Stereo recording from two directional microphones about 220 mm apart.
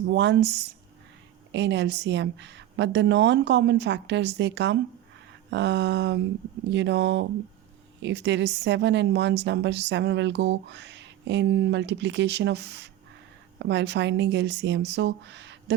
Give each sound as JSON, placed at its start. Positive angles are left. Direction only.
{"t": 0.1, "sound": "a woman's voice", "side_deg": -55}